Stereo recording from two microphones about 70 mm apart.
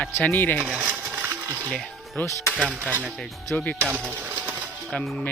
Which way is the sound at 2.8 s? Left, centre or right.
Right.